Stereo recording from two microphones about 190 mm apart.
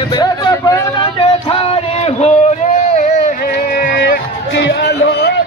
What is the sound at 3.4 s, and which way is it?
Music, 50° left (ahead or behind).